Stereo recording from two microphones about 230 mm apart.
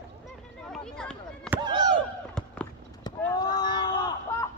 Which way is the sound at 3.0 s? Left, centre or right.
Centre.